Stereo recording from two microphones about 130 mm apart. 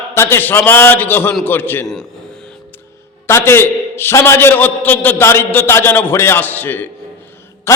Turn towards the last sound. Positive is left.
turn(degrees=20)  # may be behind; listen again after turning